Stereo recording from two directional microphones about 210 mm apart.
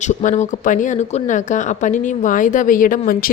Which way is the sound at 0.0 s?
35° left (ahead or behind).